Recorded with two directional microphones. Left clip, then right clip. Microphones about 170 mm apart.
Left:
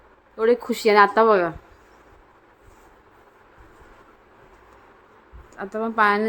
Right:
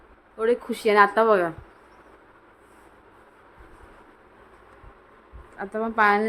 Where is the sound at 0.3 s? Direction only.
15° left (ahead or behind).